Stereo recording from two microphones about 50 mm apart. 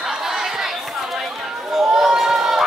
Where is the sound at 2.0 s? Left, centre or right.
Centre.